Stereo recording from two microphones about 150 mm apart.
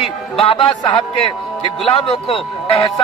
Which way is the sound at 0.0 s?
35° left (ahead or behind).